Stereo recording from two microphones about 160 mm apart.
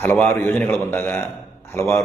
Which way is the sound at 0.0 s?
15° left (ahead or behind).